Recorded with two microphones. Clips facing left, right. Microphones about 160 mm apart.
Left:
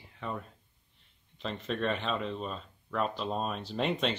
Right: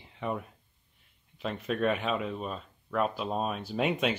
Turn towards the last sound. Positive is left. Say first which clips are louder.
# right 2 dB
turn(degrees=-5)  # may be behind; listen again after turning